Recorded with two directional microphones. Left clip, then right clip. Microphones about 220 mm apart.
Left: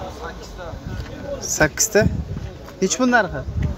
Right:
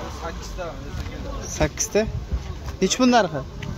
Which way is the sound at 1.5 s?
15° left (ahead or behind).